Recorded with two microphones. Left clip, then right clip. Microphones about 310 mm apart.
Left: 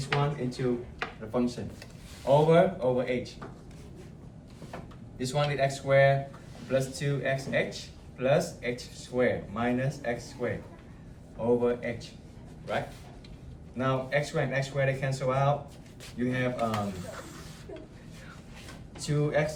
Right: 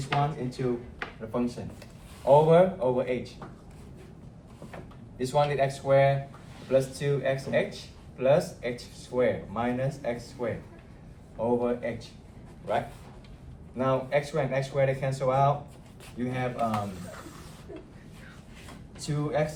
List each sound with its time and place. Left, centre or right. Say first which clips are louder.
0.1 s speech: right 2 dB; centre
5.1 s speech: right 4 dB; centre
11.6 s speech: left 1 dB; centre
13.7 s speech: right 2 dB; centre
19.0 s speech: left 1 dB; centre